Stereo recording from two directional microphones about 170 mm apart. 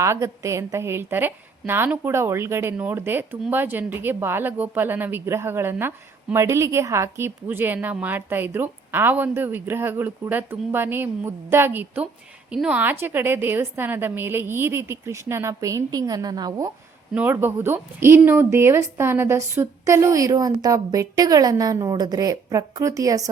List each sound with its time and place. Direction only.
0.0 s speech: 15° right (ahead or behind)
17.2 s speech: 10° right (ahead or behind)